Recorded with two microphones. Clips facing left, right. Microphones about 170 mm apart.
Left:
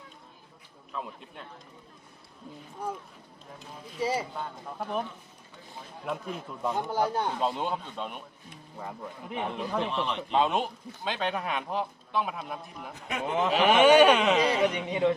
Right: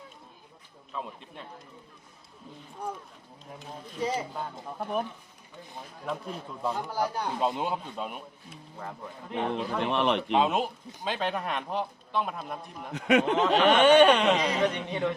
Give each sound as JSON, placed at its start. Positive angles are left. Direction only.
{"t": 0.9, "sound": "a man's voice", "side_deg": 0}
{"t": 4.0, "sound": "speech", "side_deg": 10}
{"t": 4.8, "sound": "a man's voice", "side_deg": -5}
{"t": 6.8, "sound": "speech", "side_deg": 25}
{"t": 7.3, "sound": "a man's voice", "side_deg": 0}
{"t": 8.8, "sound": "speech", "side_deg": 10}
{"t": 9.8, "sound": "speech", "side_deg": -65}
{"t": 10.3, "sound": "a man's voice", "side_deg": 0}
{"t": 12.9, "sound": "speech", "side_deg": -75}
{"t": 13.3, "sound": "speech", "side_deg": 10}